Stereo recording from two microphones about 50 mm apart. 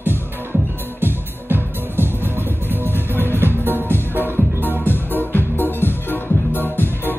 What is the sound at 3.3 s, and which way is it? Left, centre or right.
Music, right.